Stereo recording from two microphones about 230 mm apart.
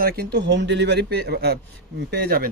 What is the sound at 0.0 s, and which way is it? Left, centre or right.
Speech, right.